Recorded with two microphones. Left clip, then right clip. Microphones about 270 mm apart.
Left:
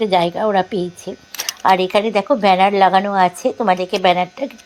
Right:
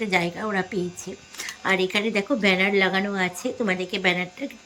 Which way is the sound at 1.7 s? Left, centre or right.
Centre.